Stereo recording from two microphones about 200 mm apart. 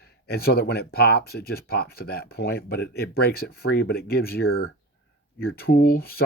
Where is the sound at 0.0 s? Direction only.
50° left (ahead or behind).